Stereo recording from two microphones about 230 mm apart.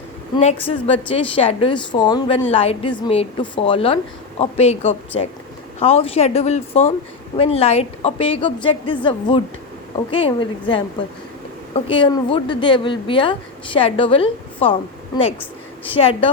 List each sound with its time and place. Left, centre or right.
0.6 s a woman's voice: left
15.9 s a woman's voice: left